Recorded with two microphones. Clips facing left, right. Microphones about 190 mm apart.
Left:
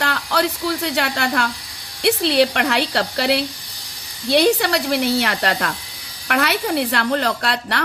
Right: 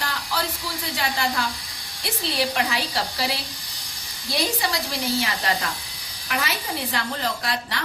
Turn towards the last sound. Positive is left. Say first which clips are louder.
# left 6 dB
turn(degrees=65)  # may be behind; listen again after turning